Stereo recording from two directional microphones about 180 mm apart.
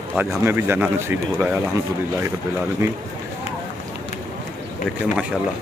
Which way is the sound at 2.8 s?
15° right (ahead or behind).